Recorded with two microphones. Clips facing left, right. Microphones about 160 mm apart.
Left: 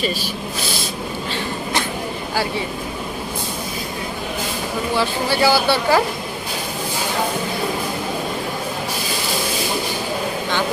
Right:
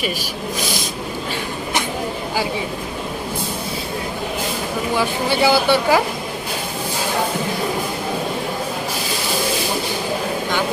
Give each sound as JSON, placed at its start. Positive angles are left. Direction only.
{"t": 0.6, "sound": "speech", "side_deg": -15}
{"t": 4.9, "sound": "speech", "side_deg": -20}